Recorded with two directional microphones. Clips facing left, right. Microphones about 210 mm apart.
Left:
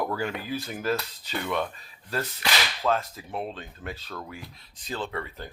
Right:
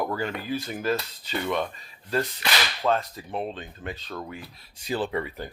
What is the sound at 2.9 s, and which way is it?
Speech, centre (ahead or behind).